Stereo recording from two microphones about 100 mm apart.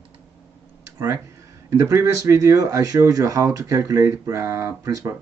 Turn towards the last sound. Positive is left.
turn(degrees=-35)  # may be behind; listen again after turning